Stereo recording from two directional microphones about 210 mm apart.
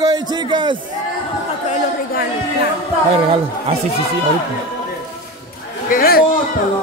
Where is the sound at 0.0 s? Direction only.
20° right (ahead or behind).